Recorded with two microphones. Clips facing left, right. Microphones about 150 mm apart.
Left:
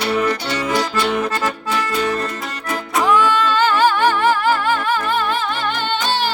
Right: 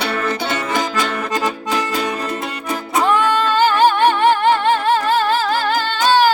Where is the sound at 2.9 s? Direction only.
25° right (ahead or behind).